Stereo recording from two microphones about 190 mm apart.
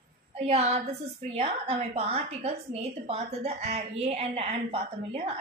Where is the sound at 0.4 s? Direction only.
35° right (ahead or behind).